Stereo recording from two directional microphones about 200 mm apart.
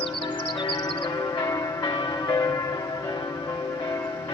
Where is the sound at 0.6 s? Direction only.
20° left (ahead or behind).